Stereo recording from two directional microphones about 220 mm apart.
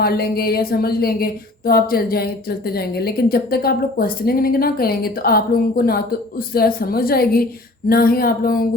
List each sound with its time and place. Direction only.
0.0 s a woman's voice: 45° left (ahead or behind)